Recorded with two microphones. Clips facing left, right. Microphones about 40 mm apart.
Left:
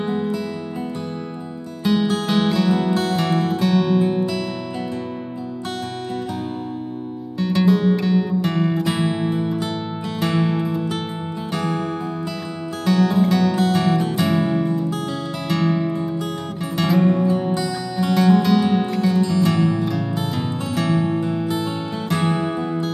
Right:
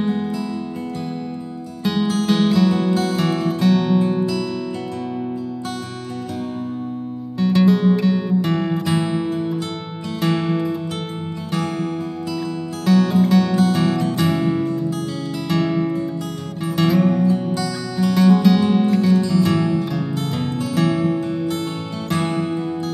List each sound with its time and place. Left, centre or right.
0.0 s music: centre
1.8 s music: centre
2.9 s music: centre
3.2 s music: centre
4.1 s music: centre
7.3 s music: centre
12.8 s music: centre
17.1 s music: centre
17.9 s music: centre